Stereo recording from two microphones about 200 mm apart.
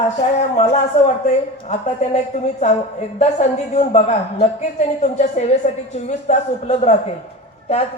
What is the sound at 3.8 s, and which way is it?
Speech, 35° left (ahead or behind).